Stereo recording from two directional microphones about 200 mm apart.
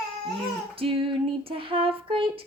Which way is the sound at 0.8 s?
25° right (ahead or behind).